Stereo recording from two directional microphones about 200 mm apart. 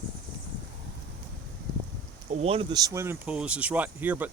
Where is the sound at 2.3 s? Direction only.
30° right (ahead or behind).